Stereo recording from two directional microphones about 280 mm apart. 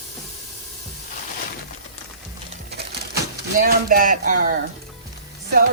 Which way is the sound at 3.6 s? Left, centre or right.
Right.